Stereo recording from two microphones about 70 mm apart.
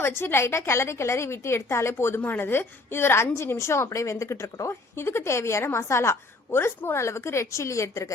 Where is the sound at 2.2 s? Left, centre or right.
Left.